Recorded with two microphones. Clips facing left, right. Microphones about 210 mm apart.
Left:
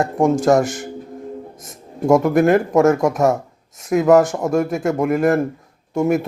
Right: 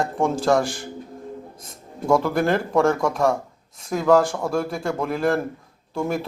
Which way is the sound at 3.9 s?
20° left (ahead or behind).